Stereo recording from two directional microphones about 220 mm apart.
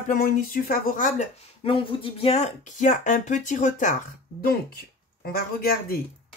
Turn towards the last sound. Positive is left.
turn(degrees=45)  # may be behind; listen again after turning